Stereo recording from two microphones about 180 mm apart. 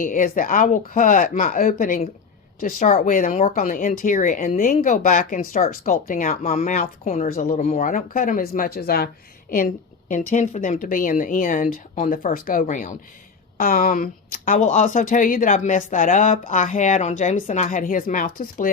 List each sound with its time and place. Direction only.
0.0 s speech: 50° left (ahead or behind)
10.1 s speech: 40° left (ahead or behind)